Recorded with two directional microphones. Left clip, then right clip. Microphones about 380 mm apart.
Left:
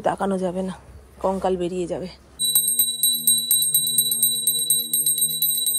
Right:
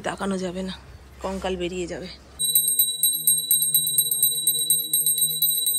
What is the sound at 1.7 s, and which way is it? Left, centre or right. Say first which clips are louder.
Speech: left 4 dB; left.